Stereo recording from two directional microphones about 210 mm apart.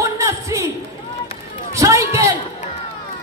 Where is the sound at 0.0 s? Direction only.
15° right (ahead or behind).